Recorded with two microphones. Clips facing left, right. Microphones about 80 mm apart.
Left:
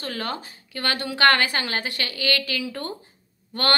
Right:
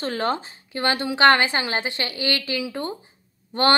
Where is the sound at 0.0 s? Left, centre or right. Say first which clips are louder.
Right 6 dB; right.